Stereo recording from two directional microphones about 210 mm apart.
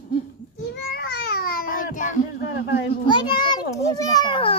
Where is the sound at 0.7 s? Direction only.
50° left (ahead or behind).